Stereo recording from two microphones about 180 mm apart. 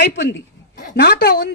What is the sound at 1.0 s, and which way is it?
Speech, 60° left (ahead or behind).